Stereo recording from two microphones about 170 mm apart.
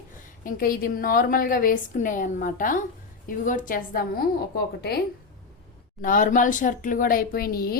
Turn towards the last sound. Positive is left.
turn(degrees=60)  # may be behind; listen again after turning